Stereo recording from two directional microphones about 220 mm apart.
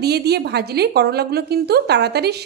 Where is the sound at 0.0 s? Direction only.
45° right (ahead or behind).